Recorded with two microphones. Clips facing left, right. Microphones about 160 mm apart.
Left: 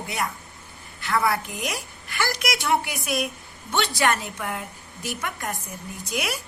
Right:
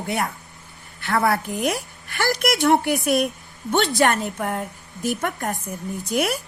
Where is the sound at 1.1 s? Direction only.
50° right (ahead or behind).